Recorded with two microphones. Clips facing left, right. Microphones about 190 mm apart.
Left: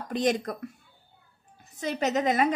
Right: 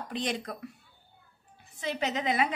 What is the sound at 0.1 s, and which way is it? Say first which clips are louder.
Speech: left 8 dB; 45° left (ahead or behind).